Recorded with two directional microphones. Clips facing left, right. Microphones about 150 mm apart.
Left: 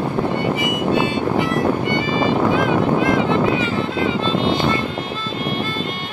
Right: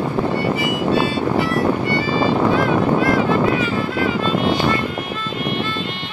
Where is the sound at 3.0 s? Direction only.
20° left (ahead or behind).